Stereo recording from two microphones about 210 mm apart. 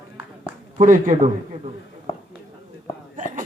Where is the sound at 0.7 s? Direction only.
35° right (ahead or behind).